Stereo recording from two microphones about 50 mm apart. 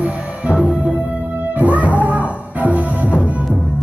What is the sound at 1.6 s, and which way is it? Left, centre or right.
Music, right.